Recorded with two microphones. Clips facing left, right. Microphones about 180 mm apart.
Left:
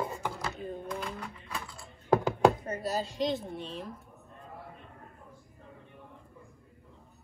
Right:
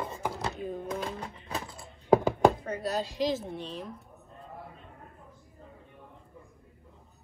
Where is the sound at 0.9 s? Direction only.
35° right (ahead or behind).